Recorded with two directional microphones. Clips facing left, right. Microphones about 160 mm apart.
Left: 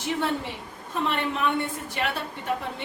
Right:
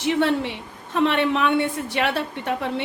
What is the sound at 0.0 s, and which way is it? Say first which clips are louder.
A woman's voice: right 7 dB; 75° right (ahead or behind).